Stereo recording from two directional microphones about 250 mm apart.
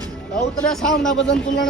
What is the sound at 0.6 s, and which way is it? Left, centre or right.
Speech, centre.